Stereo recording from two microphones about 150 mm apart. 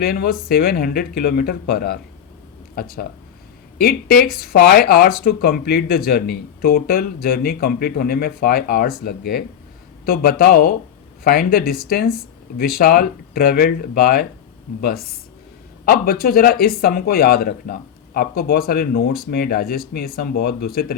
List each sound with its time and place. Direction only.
0.0 s speech: 80° left
15.9 s speech: 90° left